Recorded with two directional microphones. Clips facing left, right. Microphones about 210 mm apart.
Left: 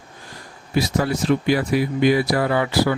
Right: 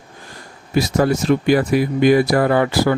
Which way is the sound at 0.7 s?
45° right (ahead or behind).